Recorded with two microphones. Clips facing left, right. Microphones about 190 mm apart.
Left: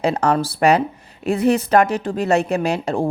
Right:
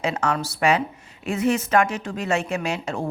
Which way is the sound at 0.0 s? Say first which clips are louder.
Left 6 dB; 35° left (ahead or behind).